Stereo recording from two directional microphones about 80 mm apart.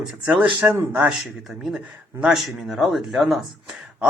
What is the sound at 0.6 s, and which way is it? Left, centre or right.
Speech, centre.